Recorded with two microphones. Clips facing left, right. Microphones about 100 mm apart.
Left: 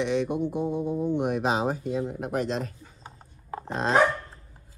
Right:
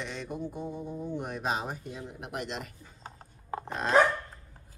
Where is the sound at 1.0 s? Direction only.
75° left (ahead or behind).